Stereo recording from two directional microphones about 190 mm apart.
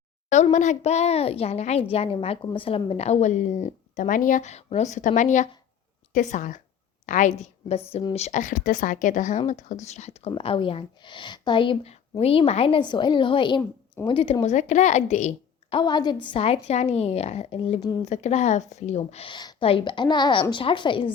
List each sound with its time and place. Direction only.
0.5 s a woman's voice: 40° left (ahead or behind)
13.6 s a woman's voice: 15° left (ahead or behind)
14.1 s a woman's voice: 25° left (ahead or behind)
15.7 s a woman's voice: 25° left (ahead or behind)